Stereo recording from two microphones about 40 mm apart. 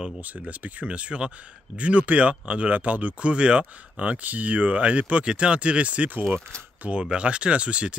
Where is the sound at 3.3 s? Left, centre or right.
Right.